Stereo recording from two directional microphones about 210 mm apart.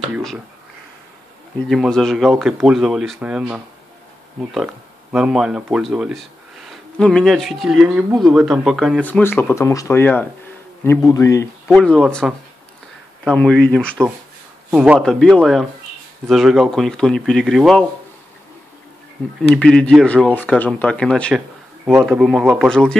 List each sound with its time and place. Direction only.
0.1 s speech: centre (ahead or behind)
1.7 s speech: centre (ahead or behind)
5.1 s speech: 5° right (ahead or behind); by 11.4 s 15° left (ahead or behind)
11.6 s speech: 5° left (ahead or behind)
19.5 s speech: 5° left (ahead or behind)